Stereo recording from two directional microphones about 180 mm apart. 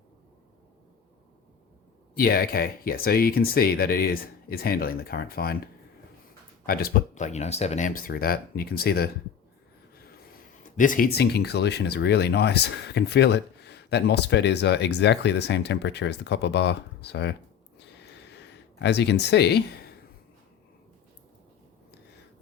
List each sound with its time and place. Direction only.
2.1 s speech: 55° left (ahead or behind)
6.7 s speech: 55° left (ahead or behind)
7.1 s speech: 40° left (ahead or behind); by 9.0 s 60° left (ahead or behind)
10.6 s speech: 45° left (ahead or behind); by 17.3 s 70° left (ahead or behind)
17.7 s a sound: 70° left (ahead or behind)